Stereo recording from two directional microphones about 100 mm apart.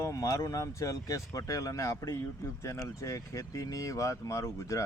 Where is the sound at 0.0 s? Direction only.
35° left (ahead or behind).